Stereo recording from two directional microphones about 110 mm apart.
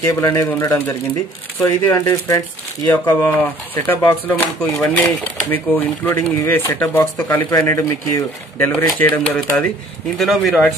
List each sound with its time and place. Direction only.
0.0 s speech: 25° left (ahead or behind)
7.5 s speech: 30° left (ahead or behind)
10.1 s speech: centre (ahead or behind)